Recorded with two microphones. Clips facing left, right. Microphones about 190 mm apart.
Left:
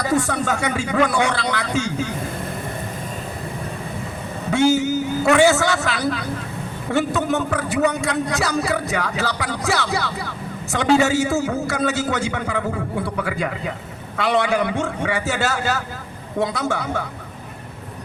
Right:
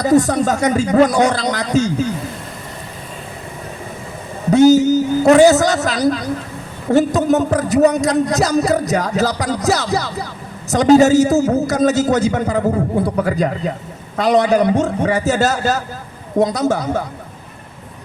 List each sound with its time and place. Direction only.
0.0 s a man's voice: 40° right (ahead or behind)
4.5 s a man's voice: 40° right (ahead or behind)